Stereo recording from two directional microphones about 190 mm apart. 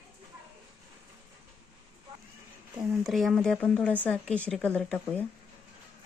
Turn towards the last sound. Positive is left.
turn(degrees=5)  # may be behind; listen again after turning